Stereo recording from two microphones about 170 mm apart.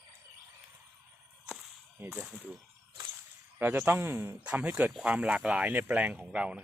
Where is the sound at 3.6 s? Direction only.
10° right (ahead or behind).